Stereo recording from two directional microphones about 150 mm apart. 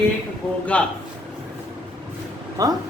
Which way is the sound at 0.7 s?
10° left (ahead or behind).